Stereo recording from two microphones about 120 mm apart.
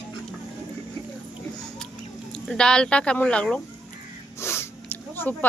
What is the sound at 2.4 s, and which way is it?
Speech, 5° left (ahead or behind).